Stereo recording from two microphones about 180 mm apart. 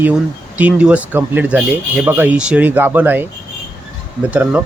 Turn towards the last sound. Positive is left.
turn(degrees=-10)  # may be behind; listen again after turning